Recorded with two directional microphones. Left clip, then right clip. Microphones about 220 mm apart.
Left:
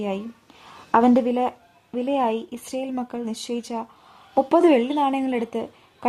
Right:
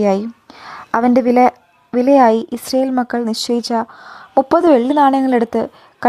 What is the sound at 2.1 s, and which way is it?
Speech, 30° right (ahead or behind).